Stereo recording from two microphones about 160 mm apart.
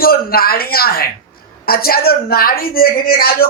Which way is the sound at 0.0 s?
70° left (ahead or behind).